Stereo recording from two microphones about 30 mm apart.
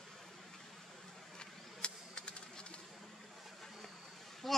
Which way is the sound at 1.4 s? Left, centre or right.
Left.